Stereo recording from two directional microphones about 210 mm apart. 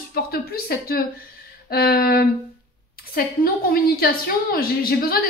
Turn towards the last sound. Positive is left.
turn(degrees=45)  # may be behind; listen again after turning